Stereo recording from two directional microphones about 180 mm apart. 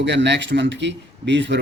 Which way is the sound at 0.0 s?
75° right (ahead or behind).